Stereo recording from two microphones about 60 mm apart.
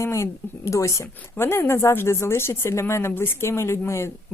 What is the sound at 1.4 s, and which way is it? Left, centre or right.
A woman's voice, left.